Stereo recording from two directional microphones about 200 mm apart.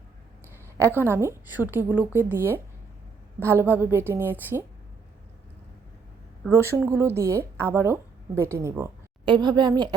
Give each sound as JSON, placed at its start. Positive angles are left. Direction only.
{"t": 0.5, "sound": "a sound", "side_deg": -15}
{"t": 1.0, "sound": "a woman's voice", "side_deg": -15}
{"t": 6.5, "sound": "a woman's voice", "side_deg": -10}